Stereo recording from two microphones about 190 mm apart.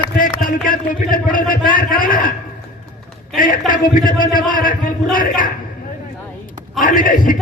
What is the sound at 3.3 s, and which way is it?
A man's voice, 45° left (ahead or behind).